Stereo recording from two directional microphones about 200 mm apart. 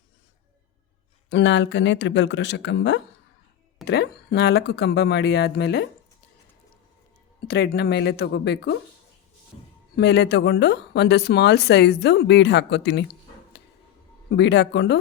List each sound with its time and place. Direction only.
1.3 s speech: 60° left (ahead or behind)
7.4 s speech: 55° left (ahead or behind)
9.9 s speech: 55° left (ahead or behind)
14.3 s speech: 60° left (ahead or behind)